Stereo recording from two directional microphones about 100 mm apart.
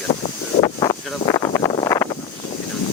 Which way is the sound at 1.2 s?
45° left (ahead or behind).